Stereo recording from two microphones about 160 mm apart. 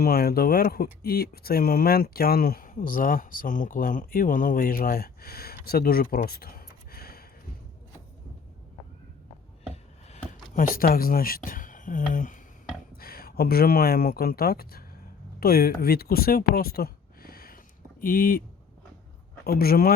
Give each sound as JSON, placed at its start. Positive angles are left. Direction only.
{"t": 0.0, "sound": "speech", "side_deg": 70}
{"t": 10.1, "sound": "speech", "side_deg": 60}
{"t": 13.0, "sound": "speech", "side_deg": 70}
{"t": 19.5, "sound": "speech", "side_deg": 70}